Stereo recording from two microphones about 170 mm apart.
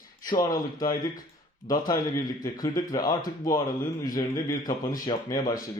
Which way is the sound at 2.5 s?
20° left (ahead or behind).